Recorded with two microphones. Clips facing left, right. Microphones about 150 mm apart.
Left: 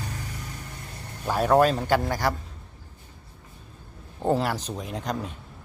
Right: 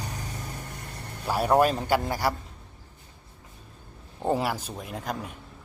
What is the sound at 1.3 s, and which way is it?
Speech, 10° right (ahead or behind).